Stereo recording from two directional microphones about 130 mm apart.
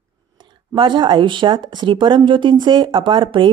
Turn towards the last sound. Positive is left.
turn(degrees=-40)  # may be behind; listen again after turning